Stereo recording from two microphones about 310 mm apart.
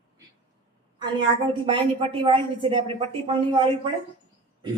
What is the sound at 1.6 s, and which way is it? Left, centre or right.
A woman's voice, centre.